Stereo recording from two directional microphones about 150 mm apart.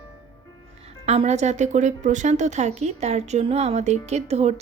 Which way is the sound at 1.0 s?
45° right (ahead or behind).